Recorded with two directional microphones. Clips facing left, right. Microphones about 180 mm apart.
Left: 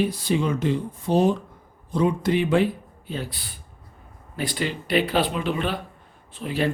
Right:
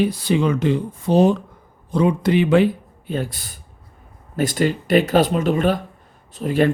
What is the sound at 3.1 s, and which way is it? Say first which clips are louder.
Speech: right 6 dB; 45° right (ahead or behind).